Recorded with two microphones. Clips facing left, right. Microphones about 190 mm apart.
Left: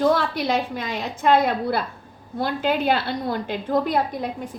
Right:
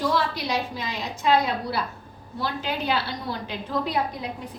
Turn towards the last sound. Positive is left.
turn(degrees=50)  # may be behind; listen again after turning